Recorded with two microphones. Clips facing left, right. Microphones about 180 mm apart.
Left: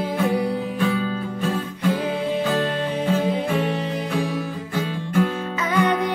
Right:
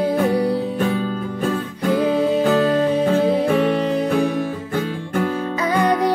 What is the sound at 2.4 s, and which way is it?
Music, 40° right (ahead or behind).